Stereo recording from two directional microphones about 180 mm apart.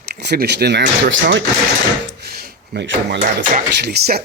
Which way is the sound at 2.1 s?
60° right (ahead or behind).